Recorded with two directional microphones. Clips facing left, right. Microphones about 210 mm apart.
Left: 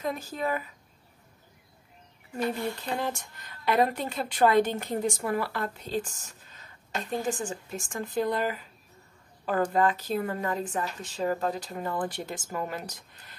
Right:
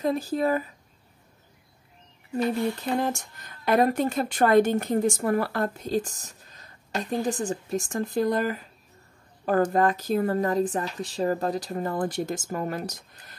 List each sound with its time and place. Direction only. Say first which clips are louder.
0.0 s speech: right 7 dB; 35° right (ahead or behind)
3.0 s speech: right 5 dB; 45° right (ahead or behind)